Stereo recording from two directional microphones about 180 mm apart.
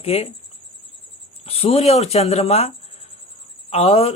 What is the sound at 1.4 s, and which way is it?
Speech, 35° left (ahead or behind).